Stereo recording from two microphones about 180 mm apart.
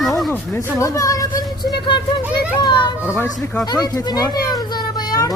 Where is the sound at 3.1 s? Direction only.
15° left (ahead or behind).